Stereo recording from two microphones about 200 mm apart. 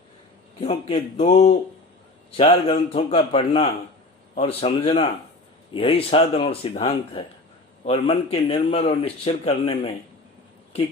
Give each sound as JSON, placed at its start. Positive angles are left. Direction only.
{"t": 0.6, "sound": "a man's voice", "side_deg": 30}